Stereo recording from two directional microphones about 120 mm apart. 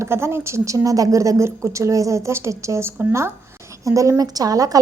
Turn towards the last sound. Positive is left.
turn(degrees=-30)  # may be behind; listen again after turning